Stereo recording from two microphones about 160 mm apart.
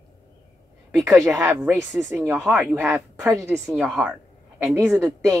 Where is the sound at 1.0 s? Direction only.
20° right (ahead or behind).